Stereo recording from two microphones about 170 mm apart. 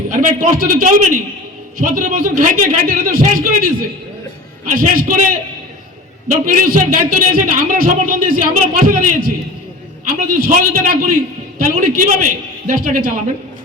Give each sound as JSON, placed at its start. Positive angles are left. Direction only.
{"t": 0.1, "sound": "a man's voice", "side_deg": -55}
{"t": 6.2, "sound": "a man's voice", "side_deg": -55}